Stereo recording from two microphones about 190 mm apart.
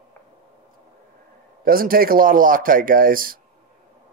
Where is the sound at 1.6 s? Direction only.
50° right (ahead or behind).